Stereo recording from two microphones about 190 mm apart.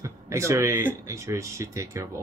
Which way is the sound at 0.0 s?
15° right (ahead or behind).